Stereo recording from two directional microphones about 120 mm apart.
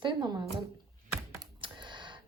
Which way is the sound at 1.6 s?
40° right (ahead or behind).